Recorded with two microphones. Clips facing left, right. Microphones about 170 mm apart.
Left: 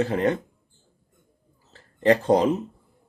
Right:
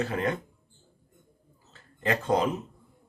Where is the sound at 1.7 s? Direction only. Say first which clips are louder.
Left 9 dB; 35° left (ahead or behind).